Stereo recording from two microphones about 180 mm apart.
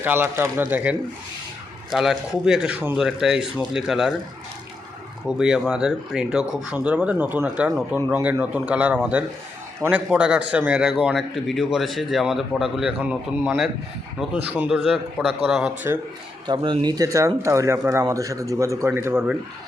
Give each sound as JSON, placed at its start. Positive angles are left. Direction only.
{"t": 0.0, "sound": "speech", "side_deg": -10}
{"t": 5.4, "sound": "speech", "side_deg": -5}
{"t": 16.5, "sound": "speech", "side_deg": -25}